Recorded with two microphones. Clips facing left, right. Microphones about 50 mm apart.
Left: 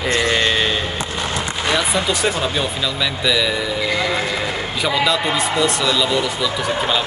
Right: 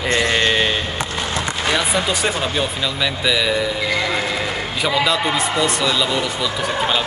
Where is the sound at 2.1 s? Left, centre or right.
Centre.